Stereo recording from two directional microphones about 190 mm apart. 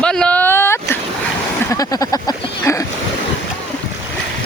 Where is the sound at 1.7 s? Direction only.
20° left (ahead or behind).